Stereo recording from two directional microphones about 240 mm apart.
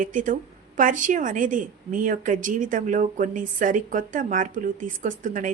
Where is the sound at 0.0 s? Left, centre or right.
Right.